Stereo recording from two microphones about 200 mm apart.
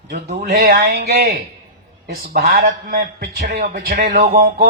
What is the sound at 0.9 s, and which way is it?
Speech, 35° right (ahead or behind).